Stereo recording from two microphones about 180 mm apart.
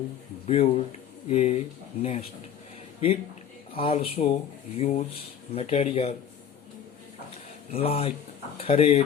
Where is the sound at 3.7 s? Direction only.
30° left (ahead or behind).